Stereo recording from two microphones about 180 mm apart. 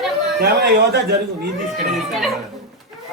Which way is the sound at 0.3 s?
65° right (ahead or behind).